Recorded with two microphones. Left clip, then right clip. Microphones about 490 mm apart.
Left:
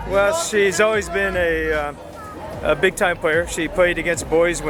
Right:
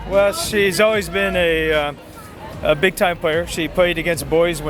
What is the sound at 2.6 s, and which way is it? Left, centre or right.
Speech, right.